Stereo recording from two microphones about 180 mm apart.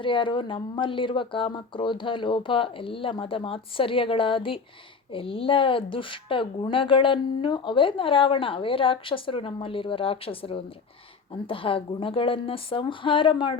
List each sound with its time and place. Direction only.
0.0 s speech: 30° left (ahead or behind)